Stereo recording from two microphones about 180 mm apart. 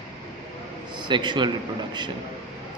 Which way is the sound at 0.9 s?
25° right (ahead or behind).